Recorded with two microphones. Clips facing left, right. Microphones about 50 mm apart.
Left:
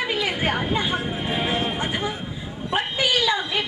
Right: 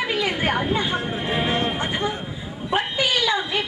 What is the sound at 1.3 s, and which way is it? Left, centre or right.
Speech, centre.